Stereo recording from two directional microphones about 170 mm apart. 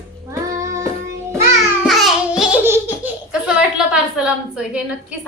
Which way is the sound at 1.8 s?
Centre (ahead or behind).